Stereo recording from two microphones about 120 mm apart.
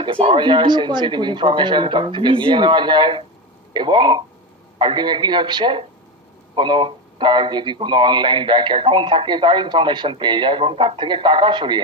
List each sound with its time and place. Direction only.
0.0 s a man's voice: 50° right (ahead or behind)